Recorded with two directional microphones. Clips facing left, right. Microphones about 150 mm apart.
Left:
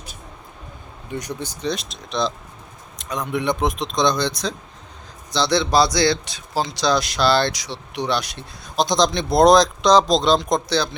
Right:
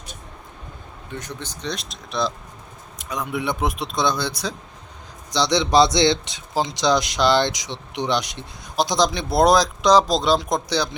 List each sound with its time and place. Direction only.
1.1 s speech: 10° left (ahead or behind); by 10.8 s 10° right (ahead or behind)